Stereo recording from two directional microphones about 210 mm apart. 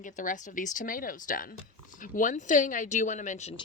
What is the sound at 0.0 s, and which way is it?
A woman's voice, 40° left (ahead or behind).